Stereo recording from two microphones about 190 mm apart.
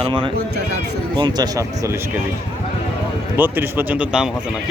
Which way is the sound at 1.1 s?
20° right (ahead or behind).